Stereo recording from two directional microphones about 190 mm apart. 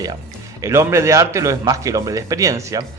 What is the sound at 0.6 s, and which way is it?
A man's voice, 15° right (ahead or behind).